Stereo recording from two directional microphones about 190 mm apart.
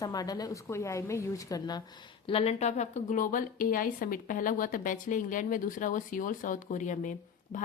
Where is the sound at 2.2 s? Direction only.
30° left (ahead or behind).